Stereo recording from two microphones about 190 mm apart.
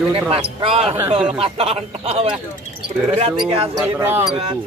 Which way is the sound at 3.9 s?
15° right (ahead or behind).